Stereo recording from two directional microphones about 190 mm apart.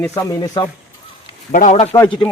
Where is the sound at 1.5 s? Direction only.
40° left (ahead or behind).